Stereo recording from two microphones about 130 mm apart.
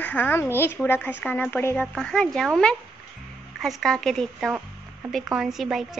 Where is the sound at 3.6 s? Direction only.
Centre (ahead or behind).